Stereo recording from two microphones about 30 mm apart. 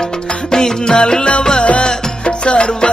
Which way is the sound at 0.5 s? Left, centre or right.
Centre.